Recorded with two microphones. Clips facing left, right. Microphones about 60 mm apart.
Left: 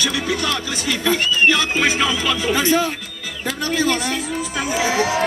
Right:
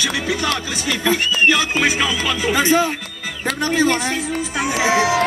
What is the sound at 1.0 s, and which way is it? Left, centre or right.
Speech, centre.